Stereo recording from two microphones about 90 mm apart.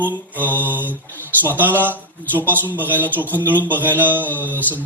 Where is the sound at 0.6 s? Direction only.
20° right (ahead or behind).